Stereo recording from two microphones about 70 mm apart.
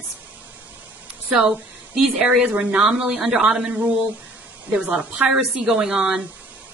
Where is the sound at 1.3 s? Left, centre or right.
Centre.